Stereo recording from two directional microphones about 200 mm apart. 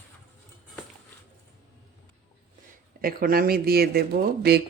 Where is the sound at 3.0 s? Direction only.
45° right (ahead or behind).